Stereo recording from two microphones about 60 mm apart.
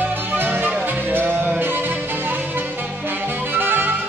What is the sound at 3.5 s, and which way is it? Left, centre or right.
Music, right.